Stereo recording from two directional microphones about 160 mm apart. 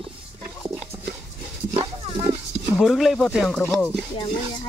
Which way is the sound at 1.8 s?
30° right (ahead or behind).